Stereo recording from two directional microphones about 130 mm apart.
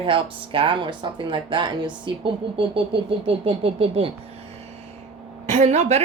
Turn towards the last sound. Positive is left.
turn(degrees=-60)  # may be behind; listen again after turning